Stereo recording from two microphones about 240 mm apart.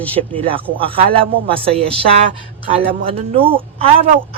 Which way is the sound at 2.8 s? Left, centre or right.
Right.